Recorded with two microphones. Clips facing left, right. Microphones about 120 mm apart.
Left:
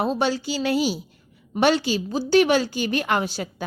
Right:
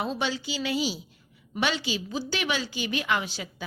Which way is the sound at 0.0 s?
45° left (ahead or behind).